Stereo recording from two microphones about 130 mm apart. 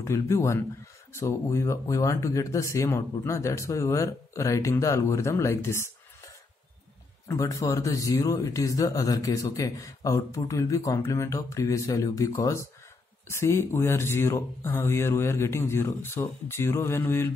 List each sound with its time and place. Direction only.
0.0 s a man's voice: 20° left (ahead or behind)